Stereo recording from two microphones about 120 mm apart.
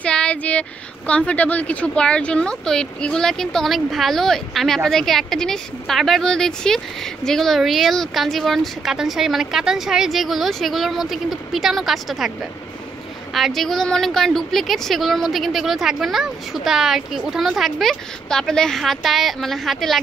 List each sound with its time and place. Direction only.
0.0 s a woman's voice: 10° left (ahead or behind)
13.3 s a woman's voice: centre (ahead or behind)